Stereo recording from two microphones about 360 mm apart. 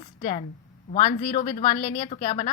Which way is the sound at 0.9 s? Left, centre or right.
Centre.